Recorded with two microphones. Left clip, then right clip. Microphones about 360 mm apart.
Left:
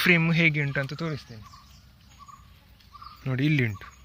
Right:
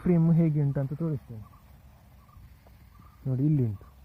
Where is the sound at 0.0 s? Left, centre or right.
Centre.